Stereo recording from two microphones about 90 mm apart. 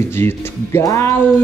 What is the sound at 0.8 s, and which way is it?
Music, 30° left (ahead or behind).